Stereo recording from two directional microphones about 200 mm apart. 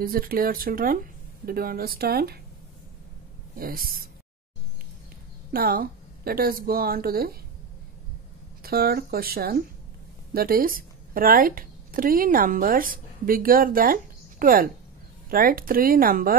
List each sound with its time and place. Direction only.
0.0 s a woman's voice: 45° right (ahead or behind)
3.5 s a woman's voice: 45° right (ahead or behind)
5.5 s a woman's voice: 45° right (ahead or behind)
8.6 s a woman's voice: 50° right (ahead or behind)